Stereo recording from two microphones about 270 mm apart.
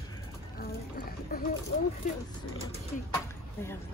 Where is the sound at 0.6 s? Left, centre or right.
Left.